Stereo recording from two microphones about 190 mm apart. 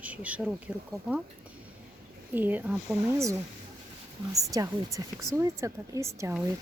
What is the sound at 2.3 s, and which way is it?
Speech, 10° right (ahead or behind).